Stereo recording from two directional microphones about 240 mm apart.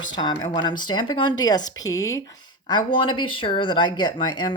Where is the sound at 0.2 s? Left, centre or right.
Centre.